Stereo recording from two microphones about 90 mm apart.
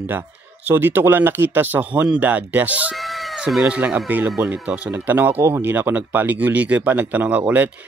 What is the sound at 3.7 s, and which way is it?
Speech, 15° right (ahead or behind).